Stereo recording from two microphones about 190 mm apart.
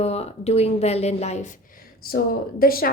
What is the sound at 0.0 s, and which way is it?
A woman's voice, 35° left (ahead or behind).